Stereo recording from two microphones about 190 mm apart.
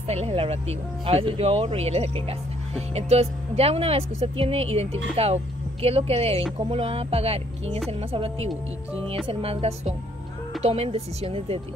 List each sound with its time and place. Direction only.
0.1 s speech: 35° right (ahead or behind)